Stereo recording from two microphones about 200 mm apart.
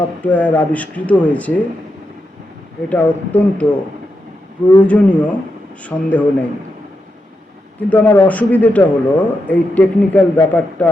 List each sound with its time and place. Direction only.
0.2 s a man's voice: 10° left (ahead or behind)
2.9 s a man's voice: 5° left (ahead or behind)
4.8 s a man's voice: 5° left (ahead or behind)
7.8 s a man's voice: 10° left (ahead or behind)